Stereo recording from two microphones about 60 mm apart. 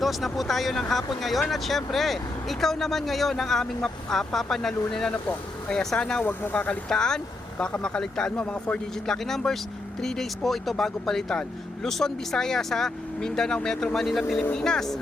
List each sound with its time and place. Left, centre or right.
0.0 s speech: centre
5.1 s speech: left
5.7 s speech: centre
6.2 s speech: left
6.8 s speech: centre
9.0 s speech: centre